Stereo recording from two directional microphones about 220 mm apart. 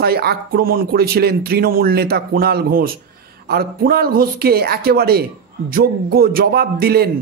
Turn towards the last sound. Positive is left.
turn(degrees=-45)  # may be behind; listen again after turning